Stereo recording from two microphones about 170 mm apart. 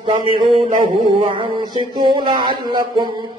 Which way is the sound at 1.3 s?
30° right (ahead or behind).